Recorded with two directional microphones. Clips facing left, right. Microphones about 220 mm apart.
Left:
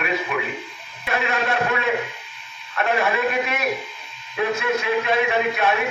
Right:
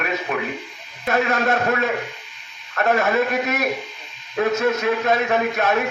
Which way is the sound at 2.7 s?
45° right (ahead or behind).